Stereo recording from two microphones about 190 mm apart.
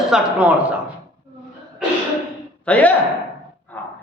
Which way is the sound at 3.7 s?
10° left (ahead or behind).